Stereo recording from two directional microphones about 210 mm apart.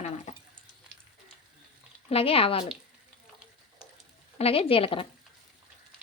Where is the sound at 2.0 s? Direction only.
25° left (ahead or behind).